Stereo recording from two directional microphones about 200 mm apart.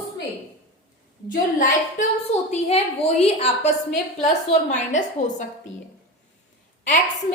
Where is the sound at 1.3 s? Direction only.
40° left (ahead or behind).